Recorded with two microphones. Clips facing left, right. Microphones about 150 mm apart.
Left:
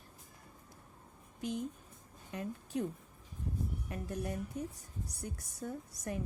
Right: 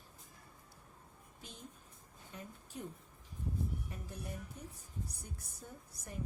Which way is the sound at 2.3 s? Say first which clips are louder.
Left 11 dB; 75° left (ahead or behind).